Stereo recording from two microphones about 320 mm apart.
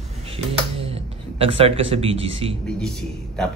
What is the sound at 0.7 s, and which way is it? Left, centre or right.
A man's voice, centre.